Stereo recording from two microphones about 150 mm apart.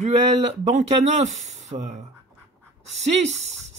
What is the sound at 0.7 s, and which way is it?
Speech, 50° right (ahead or behind).